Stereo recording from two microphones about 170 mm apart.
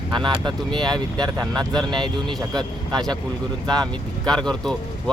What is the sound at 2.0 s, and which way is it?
Speech, 25° right (ahead or behind).